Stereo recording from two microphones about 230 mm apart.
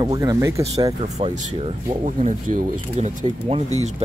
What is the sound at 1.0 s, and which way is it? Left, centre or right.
Speech, right.